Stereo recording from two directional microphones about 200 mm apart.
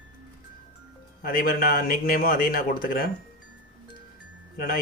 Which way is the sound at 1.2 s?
45° left (ahead or behind).